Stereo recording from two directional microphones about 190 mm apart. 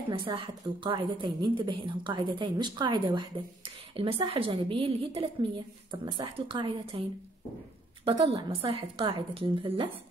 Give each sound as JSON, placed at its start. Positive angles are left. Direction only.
{"t": 0.1, "sound": "a woman's voice", "side_deg": -25}
{"t": 8.0, "sound": "a woman's voice", "side_deg": -30}